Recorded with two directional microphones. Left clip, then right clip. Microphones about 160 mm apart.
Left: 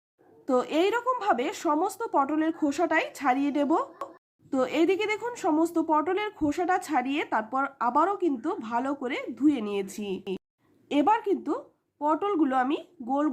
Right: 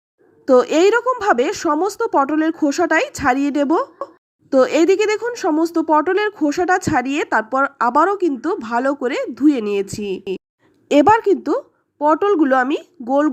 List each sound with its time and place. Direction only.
0.4 s a woman's voice: 35° right (ahead or behind)